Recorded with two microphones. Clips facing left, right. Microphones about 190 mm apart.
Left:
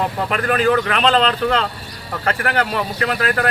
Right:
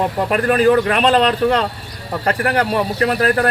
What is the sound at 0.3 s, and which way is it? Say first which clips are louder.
Speech: right 5 dB; 40° right (ahead or behind).